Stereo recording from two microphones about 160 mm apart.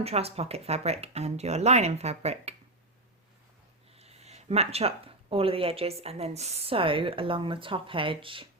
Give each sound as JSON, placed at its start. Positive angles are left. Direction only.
{"t": 0.0, "sound": "speech", "side_deg": -40}
{"t": 3.9, "sound": "speech", "side_deg": -40}